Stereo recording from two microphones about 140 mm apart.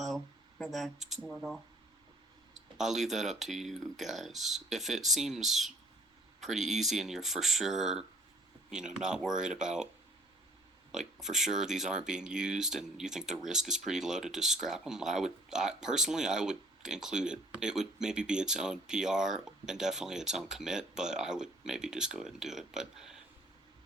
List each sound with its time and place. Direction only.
0.6 s speech: centre (ahead or behind)
2.7 s speech: centre (ahead or behind)
10.9 s speech: 5° right (ahead or behind)